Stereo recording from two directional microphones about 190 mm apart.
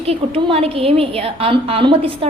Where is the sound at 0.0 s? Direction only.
30° right (ahead or behind).